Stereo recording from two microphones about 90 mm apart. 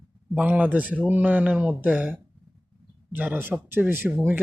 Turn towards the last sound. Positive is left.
turn(degrees=-25)  # may be behind; listen again after turning